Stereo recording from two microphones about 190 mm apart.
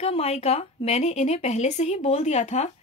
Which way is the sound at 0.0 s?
30° left (ahead or behind).